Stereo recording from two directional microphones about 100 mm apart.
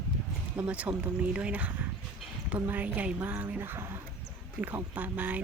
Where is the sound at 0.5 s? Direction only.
15° right (ahead or behind).